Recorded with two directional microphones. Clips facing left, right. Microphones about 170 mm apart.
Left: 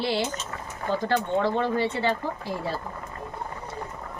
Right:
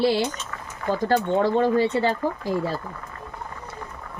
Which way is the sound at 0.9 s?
40° right (ahead or behind).